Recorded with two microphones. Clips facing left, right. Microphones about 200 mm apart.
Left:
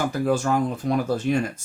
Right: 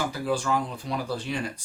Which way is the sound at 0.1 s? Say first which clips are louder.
Left 5 dB; 45° left (ahead or behind).